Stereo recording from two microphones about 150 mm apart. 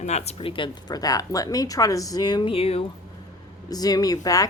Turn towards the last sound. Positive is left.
turn(degrees=25)  # may be behind; listen again after turning